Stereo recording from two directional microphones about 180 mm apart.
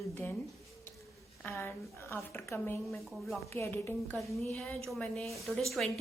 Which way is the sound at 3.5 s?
15° left (ahead or behind).